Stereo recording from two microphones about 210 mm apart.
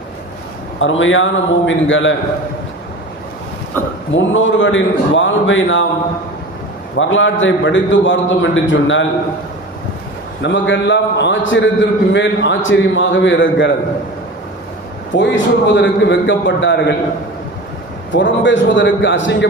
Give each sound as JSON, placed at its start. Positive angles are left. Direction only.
{"t": 0.8, "sound": "a man's voice", "side_deg": 65}
{"t": 4.1, "sound": "a man's voice", "side_deg": 65}
{"t": 6.9, "sound": "a man's voice", "side_deg": 65}
{"t": 10.4, "sound": "a man's voice", "side_deg": 60}
{"t": 15.1, "sound": "a man's voice", "side_deg": 60}
{"t": 18.1, "sound": "a man's voice", "side_deg": 60}